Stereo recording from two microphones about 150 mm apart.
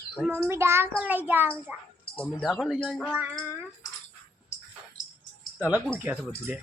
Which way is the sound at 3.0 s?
10° right (ahead or behind).